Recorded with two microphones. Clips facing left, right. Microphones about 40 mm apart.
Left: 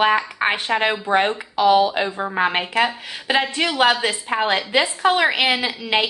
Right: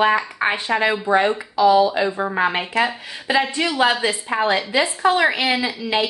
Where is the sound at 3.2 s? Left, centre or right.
Left.